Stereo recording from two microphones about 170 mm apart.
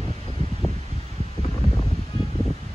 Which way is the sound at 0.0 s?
30° left (ahead or behind).